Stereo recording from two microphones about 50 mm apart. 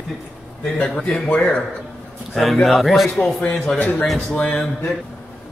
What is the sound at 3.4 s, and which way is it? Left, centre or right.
A man's voice, left.